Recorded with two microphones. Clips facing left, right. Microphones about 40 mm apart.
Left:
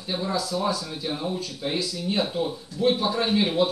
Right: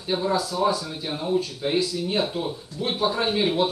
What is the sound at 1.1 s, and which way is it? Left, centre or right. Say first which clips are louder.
Speech: right 6 dB; centre.